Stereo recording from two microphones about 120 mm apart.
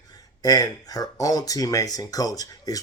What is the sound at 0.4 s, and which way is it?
Speech, 30° left (ahead or behind).